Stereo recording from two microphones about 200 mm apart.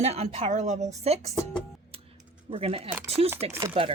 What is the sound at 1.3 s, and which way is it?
Speech, 15° left (ahead or behind).